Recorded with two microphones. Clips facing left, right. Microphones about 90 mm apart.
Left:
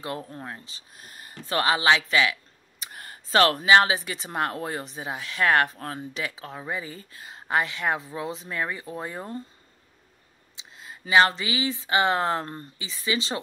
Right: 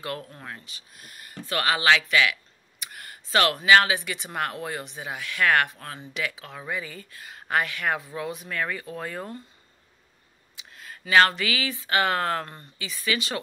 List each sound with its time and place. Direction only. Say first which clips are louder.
0.0 s speech: left 1 dB; 25° left (ahead or behind)
2.8 s a sound: left 1 dB; 35° left (ahead or behind)
3.7 s speech: right 1 dB; 30° left (ahead or behind)
10.5 s speech: even; 20° left (ahead or behind)